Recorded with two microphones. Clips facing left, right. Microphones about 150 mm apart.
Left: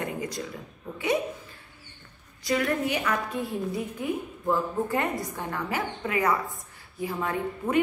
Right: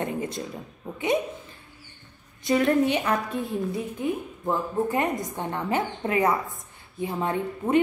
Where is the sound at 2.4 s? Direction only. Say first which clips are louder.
Right 5 dB; 25° right (ahead or behind).